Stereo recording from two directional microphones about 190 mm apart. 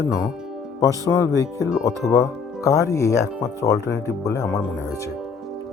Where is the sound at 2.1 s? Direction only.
15° left (ahead or behind).